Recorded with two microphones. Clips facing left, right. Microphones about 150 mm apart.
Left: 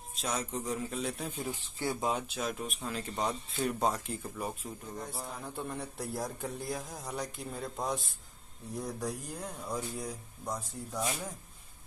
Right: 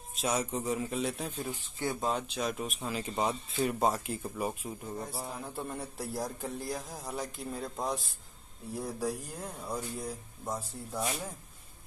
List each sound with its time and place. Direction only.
0.1 s speech: 5° right (ahead or behind)
1.5 s speech: 20° right (ahead or behind)
2.0 s speech: 5° left (ahead or behind)